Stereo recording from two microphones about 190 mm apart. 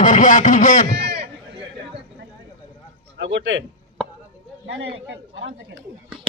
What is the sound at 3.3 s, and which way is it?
Speech, 75° right (ahead or behind).